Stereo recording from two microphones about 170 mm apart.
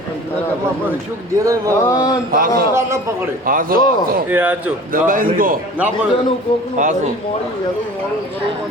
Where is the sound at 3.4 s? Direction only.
55° right (ahead or behind).